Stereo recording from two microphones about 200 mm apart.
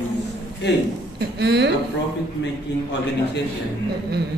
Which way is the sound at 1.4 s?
55° right (ahead or behind).